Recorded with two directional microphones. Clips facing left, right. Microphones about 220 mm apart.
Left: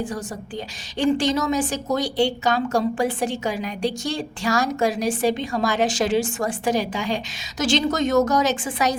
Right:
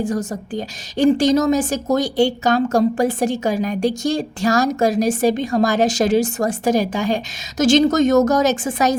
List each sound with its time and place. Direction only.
0.0 s a woman's voice: 40° right (ahead or behind)